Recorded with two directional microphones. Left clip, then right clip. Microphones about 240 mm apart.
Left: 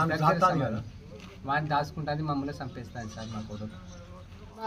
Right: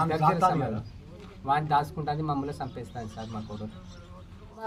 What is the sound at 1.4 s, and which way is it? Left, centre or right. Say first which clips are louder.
A man's voice: right 3 dB; centre.